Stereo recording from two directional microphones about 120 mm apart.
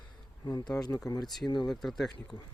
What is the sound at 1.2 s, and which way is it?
Speech, centre (ahead or behind).